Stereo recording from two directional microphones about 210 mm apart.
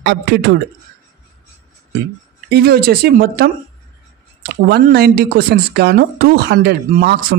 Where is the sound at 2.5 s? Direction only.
50° right (ahead or behind).